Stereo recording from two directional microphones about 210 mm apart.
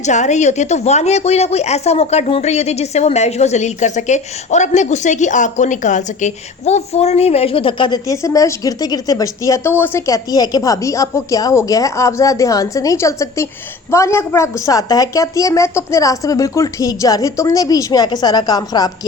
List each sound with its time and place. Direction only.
0.0 s a woman's voice: 35° left (ahead or behind); by 18.9 s 20° left (ahead or behind)